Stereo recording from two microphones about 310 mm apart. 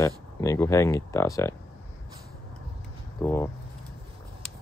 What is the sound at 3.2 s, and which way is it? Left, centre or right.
Speech, centre.